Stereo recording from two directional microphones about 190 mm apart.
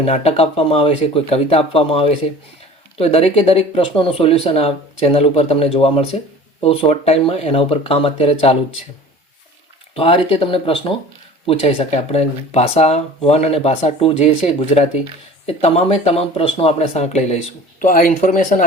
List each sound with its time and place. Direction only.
0.0 s speech: 35° left (ahead or behind)
9.9 s speech: 30° left (ahead or behind)